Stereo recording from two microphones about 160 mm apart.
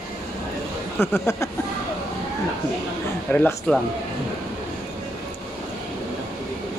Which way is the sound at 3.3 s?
10° left (ahead or behind).